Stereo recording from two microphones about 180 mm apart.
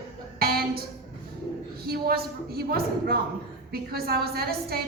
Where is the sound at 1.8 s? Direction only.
60° right (ahead or behind).